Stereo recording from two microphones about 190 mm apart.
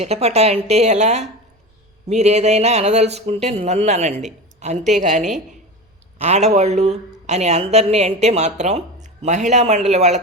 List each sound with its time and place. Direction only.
0.0 s speech: 35° right (ahead or behind)